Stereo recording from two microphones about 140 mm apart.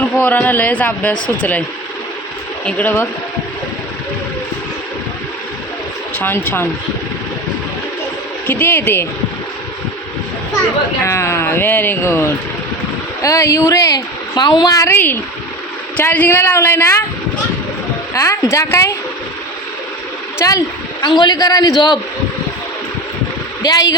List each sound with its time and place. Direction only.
0.0 s speech: 10° left (ahead or behind)
2.6 s speech: 10° left (ahead or behind)
6.1 s speech: 15° left (ahead or behind)
8.4 s speech: 15° left (ahead or behind)
11.0 s speech: 20° left (ahead or behind)
18.1 s speech: 20° left (ahead or behind)
20.4 s speech: 25° left (ahead or behind)
23.6 s speech: 25° left (ahead or behind)